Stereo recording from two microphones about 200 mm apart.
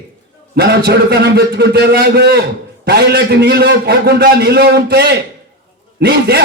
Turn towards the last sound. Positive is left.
turn(degrees=-55)  # may be behind; listen again after turning